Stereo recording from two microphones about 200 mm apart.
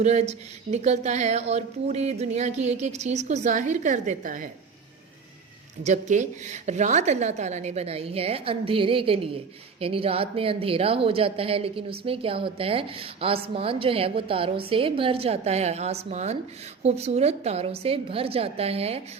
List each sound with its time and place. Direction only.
0.0 s speech: 35° right (ahead or behind)
5.8 s a woman's voice: 35° right (ahead or behind)